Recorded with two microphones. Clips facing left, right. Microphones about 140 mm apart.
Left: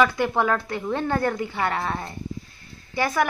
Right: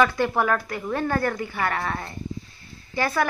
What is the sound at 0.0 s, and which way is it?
A woman's voice, 15° left (ahead or behind).